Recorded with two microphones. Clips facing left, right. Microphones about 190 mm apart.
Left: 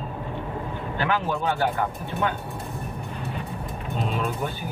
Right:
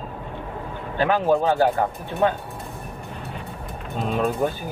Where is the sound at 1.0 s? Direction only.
35° right (ahead or behind).